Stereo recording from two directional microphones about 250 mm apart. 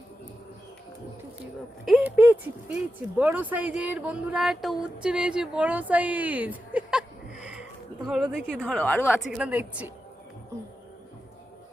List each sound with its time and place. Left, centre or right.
1.8 s speech: centre
9.3 s speech: centre